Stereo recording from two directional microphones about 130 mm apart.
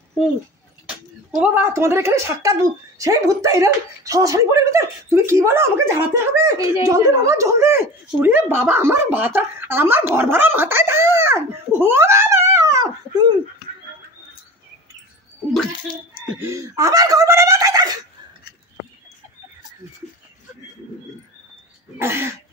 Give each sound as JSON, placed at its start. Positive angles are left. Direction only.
{"t": 1.3, "sound": "a woman's voice", "side_deg": -15}
{"t": 10.1, "sound": "dog", "side_deg": -15}
{"t": 11.8, "sound": "a sound", "side_deg": -20}
{"t": 16.3, "sound": "speech", "side_deg": -15}
{"t": 21.9, "sound": "cough", "side_deg": -20}